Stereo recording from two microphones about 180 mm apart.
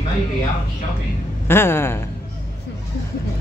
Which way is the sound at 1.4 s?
15° left (ahead or behind).